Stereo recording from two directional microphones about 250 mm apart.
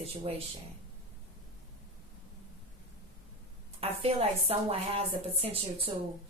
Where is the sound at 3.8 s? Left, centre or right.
Right.